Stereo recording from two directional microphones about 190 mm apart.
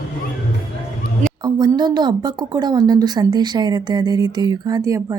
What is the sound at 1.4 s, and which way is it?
Speech, 20° right (ahead or behind).